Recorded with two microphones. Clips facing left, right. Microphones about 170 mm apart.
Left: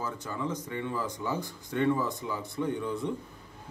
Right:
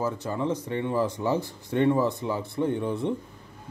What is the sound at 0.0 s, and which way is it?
A man's voice, 25° right (ahead or behind).